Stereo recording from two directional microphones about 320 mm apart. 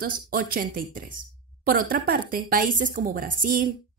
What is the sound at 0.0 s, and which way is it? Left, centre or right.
A woman's voice, right.